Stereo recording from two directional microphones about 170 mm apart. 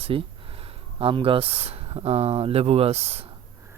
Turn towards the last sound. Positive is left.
turn(degrees=-35)  # may be behind; listen again after turning